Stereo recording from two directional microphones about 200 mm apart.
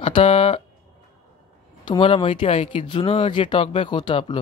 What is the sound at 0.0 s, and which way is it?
Speech, 25° left (ahead or behind).